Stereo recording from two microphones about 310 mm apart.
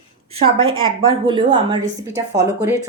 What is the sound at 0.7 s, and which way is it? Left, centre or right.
Speech, centre.